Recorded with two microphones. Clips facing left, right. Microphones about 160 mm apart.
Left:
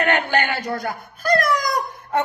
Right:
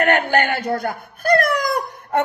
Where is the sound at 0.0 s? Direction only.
50° right (ahead or behind).